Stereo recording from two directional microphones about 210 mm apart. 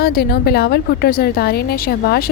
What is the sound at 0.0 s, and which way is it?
A woman's voice, 50° left (ahead or behind).